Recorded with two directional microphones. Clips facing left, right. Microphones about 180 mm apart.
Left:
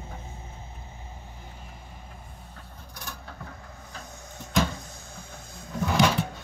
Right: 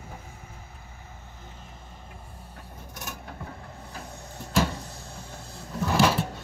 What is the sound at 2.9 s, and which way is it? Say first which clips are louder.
Vehicle: right 2 dB; 20° right (ahead or behind).